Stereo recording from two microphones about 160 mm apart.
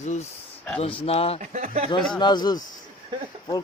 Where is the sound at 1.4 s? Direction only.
50° right (ahead or behind).